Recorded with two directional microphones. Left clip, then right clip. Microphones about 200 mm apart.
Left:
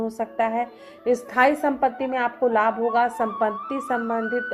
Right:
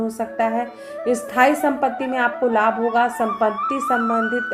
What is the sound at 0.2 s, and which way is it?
A woman's voice, 20° left (ahead or behind).